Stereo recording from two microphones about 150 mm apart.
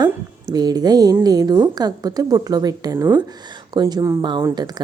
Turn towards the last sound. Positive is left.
turn(degrees=-30)  # may be behind; listen again after turning